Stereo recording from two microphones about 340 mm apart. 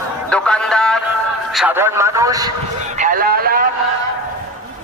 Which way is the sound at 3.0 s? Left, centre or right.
Right.